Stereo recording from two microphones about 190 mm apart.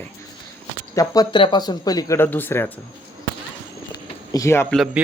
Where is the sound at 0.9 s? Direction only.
20° left (ahead or behind).